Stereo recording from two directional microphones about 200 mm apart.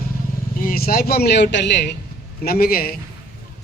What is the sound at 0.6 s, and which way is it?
A man's voice, 50° left (ahead or behind).